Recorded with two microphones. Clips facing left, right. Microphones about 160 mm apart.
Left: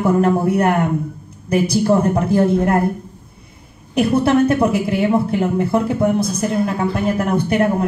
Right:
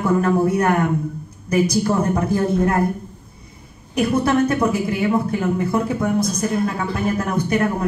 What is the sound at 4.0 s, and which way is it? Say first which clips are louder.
A woman's voice: left 3 dB; 30° left (ahead or behind).